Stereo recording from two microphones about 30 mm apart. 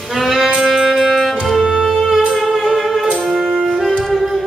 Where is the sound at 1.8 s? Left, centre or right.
Centre.